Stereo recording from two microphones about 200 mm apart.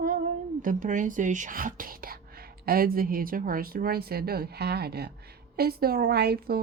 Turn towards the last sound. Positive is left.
turn(degrees=-55)  # may be behind; listen again after turning